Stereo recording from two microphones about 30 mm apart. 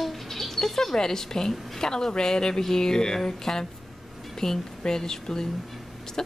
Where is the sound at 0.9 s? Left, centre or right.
Centre.